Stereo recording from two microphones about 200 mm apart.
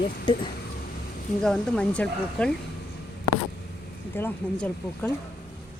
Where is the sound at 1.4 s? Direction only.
5° left (ahead or behind).